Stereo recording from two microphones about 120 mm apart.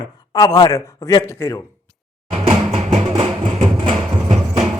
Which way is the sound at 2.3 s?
65° right (ahead or behind).